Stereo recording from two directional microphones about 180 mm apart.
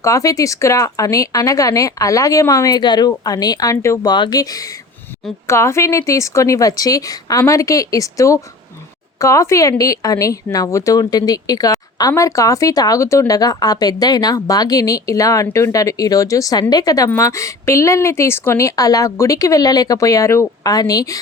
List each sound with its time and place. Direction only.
0.0 s a woman's voice: 20° left (ahead or behind)